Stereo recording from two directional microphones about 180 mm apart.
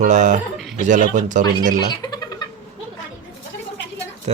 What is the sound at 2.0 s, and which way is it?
Cat, 20° left (ahead or behind).